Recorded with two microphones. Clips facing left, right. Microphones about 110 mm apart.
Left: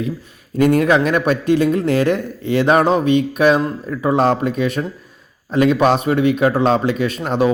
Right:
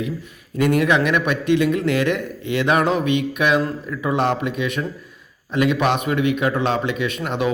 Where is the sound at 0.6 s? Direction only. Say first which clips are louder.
Left 4 dB; 35° left (ahead or behind).